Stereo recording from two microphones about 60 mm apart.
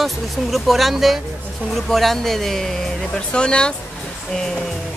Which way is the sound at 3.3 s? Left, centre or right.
Centre.